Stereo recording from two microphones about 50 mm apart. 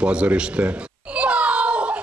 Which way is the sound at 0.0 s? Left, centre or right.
Right.